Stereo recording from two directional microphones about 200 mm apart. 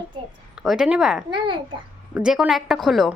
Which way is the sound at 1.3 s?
25° right (ahead or behind).